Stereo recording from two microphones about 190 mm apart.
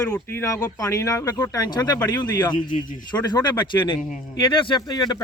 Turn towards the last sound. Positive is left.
turn(degrees=20)  # may be behind; listen again after turning